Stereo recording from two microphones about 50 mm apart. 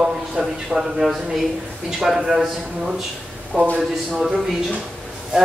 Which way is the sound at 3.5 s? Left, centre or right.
Right.